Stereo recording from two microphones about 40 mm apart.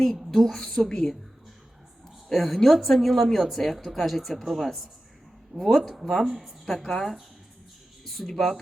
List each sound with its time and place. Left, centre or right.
0.0 s speech: centre
0.5 s speech: centre
2.3 s speech: centre
5.8 s speech: centre
6.7 s speech: centre